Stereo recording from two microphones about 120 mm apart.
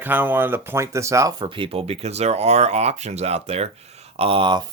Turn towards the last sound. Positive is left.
turn(degrees=-45)  # may be behind; listen again after turning